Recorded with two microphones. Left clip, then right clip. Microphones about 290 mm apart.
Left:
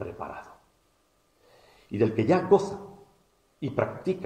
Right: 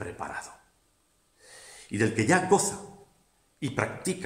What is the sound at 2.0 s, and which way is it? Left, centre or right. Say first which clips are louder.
Speech: left 1 dB; right.